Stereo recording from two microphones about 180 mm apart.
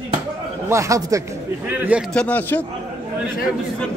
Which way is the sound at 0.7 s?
15° right (ahead or behind).